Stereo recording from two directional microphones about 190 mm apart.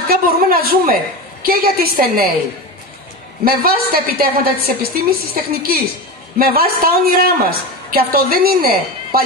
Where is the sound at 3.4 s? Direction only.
50° right (ahead or behind).